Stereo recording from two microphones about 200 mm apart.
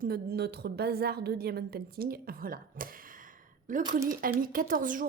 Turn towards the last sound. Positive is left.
turn(degrees=-40)  # may be behind; listen again after turning